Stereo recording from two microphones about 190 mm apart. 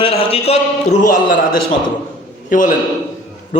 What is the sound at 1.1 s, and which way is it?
Speech, 45° left (ahead or behind).